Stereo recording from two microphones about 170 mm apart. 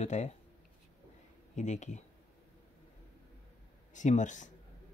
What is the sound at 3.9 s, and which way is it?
Speech, 45° left (ahead or behind).